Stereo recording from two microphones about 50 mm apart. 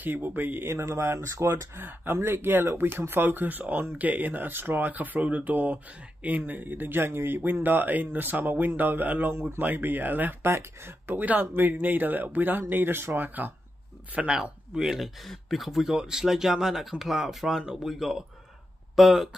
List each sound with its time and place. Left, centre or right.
0.0 s speech: right
0.7 s speech: right
1.8 s speech: right
9.3 s speech: right
9.6 s speech: right
10.4 s speech: right
11.1 s speech: right
14.3 s speech: centre